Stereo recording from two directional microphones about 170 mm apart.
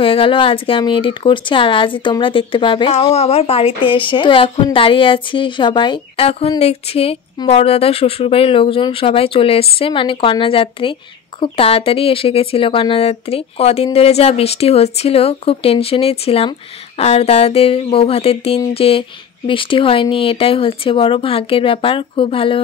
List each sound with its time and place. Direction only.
0.0 s speech: 30° left (ahead or behind)